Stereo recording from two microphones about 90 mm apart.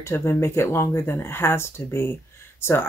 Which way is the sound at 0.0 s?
30° left (ahead or behind).